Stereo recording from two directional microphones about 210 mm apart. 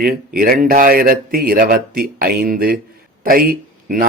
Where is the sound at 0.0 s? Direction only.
45° right (ahead or behind).